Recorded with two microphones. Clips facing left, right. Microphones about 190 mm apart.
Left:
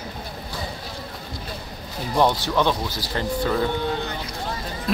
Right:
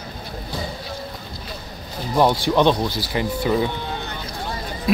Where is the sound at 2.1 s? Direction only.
10° right (ahead or behind).